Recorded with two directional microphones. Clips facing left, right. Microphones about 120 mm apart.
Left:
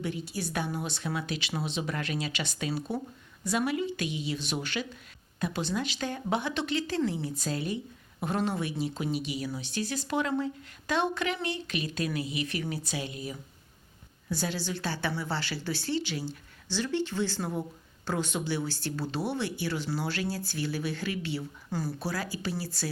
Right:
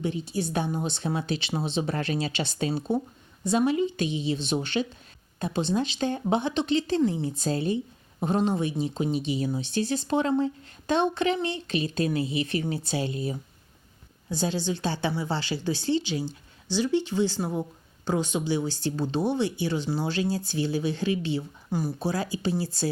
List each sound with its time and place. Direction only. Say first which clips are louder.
0.0 s speech: right 5 dB; 25° right (ahead or behind)